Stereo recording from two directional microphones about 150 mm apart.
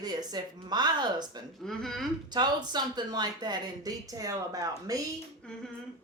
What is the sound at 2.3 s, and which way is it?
Speech, 30° right (ahead or behind).